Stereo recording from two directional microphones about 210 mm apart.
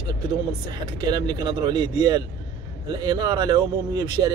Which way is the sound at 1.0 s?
20° right (ahead or behind).